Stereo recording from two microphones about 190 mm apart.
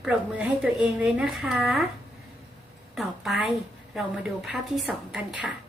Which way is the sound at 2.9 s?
Centre (ahead or behind).